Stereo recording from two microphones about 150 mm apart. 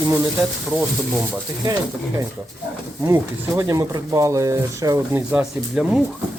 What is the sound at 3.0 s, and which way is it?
Speech, 20° right (ahead or behind).